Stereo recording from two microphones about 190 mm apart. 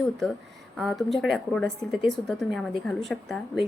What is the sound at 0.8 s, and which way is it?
Speech, centre (ahead or behind).